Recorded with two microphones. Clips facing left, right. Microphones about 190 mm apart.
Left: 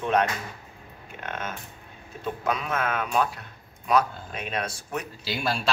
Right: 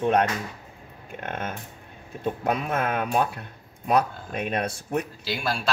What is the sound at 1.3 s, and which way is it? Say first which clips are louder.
Speech: right 2 dB; 55° right (ahead or behind).